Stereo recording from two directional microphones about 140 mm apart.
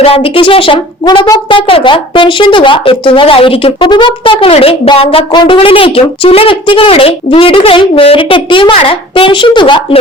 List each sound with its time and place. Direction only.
0.0 s a woman's voice: 40° left (ahead or behind)